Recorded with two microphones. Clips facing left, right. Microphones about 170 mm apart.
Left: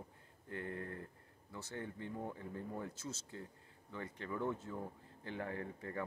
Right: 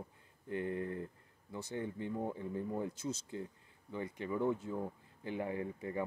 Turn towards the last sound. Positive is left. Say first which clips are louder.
# right 5 dB
turn(degrees=-15)  # may be behind; listen again after turning